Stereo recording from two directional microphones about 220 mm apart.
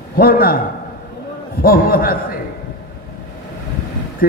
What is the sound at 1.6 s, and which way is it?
Speech, 40° left (ahead or behind).